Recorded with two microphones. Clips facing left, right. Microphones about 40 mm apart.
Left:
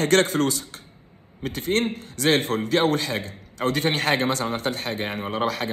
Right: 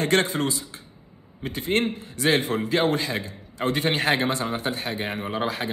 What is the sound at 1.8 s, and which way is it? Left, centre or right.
A man's voice, left.